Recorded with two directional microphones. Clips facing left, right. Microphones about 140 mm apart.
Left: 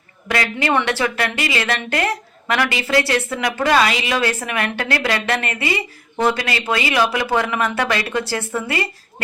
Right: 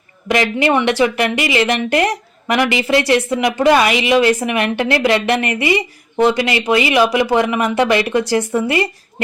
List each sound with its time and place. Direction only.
0.3 s speech: 20° right (ahead or behind)